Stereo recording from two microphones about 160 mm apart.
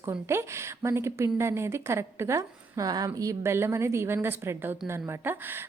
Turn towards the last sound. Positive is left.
turn(degrees=-15)  # may be behind; listen again after turning